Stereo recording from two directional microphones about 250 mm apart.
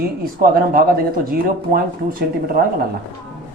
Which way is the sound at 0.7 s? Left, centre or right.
Right.